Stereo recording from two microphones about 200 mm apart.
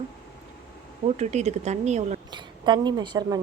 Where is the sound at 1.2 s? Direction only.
35° right (ahead or behind).